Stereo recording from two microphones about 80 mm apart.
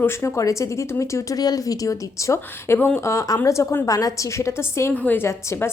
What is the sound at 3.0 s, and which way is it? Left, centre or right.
A woman's voice, left.